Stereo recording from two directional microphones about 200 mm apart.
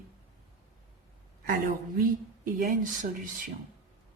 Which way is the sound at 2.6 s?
40° right (ahead or behind).